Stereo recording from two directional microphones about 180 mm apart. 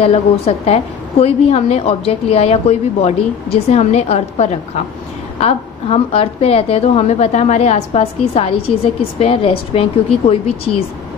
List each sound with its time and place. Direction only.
0.0 s speech: 35° left (ahead or behind)